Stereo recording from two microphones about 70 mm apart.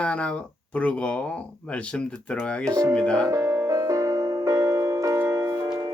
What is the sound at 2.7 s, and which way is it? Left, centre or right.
Speech, right.